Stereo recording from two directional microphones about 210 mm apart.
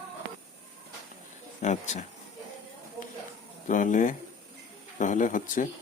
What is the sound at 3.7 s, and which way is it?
Speech, 40° left (ahead or behind).